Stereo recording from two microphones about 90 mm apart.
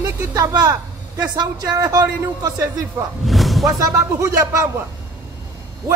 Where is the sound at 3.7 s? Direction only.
35° right (ahead or behind).